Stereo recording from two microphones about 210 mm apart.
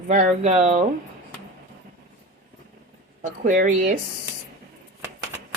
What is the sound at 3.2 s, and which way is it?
Speech, 40° right (ahead or behind).